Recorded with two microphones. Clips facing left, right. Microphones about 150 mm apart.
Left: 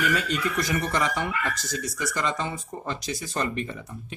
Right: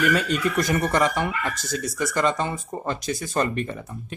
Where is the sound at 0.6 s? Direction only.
50° right (ahead or behind).